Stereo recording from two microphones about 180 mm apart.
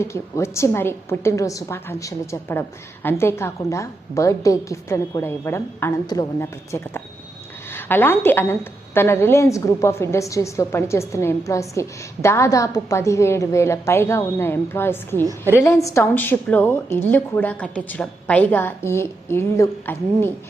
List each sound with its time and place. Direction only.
0.0 s a woman's voice: 15° left (ahead or behind)
15.2 s a woman's voice: 15° right (ahead or behind)
15.6 s a woman's voice: 15° left (ahead or behind)